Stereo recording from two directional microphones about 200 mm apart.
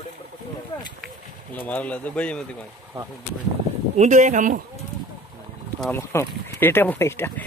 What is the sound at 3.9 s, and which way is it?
Speech, 35° right (ahead or behind).